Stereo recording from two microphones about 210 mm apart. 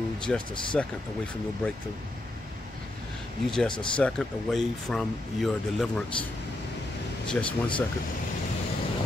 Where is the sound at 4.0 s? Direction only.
Centre (ahead or behind).